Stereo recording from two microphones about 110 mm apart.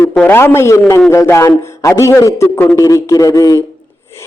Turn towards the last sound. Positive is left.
turn(degrees=30)  # may be behind; listen again after turning